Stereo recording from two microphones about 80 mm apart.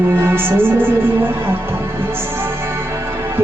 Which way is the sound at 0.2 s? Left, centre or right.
Right.